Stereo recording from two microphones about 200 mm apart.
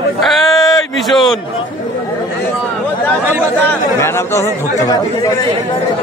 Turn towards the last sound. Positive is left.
turn(degrees=20)  # may be behind; listen again after turning